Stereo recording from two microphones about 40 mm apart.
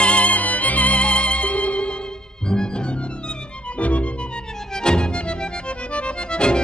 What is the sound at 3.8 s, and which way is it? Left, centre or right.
Music, left.